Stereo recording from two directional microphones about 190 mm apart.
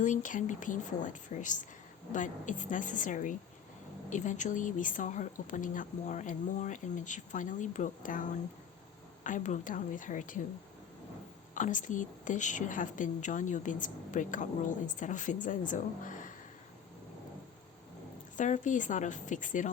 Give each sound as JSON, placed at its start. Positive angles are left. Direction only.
{"t": 0.0, "sound": "a woman's voice", "side_deg": 40}
{"t": 11.5, "sound": "a woman's voice", "side_deg": 40}
{"t": 18.3, "sound": "a woman's voice", "side_deg": 40}